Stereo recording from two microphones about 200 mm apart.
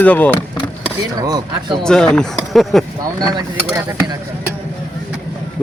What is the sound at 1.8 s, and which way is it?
A man's voice, 5° left (ahead or behind).